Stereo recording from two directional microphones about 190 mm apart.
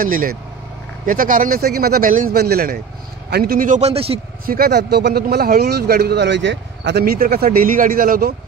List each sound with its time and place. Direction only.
0.0 s speech: 45° right (ahead or behind); by 4.2 s 30° right (ahead or behind)
4.5 s speech: 55° right (ahead or behind)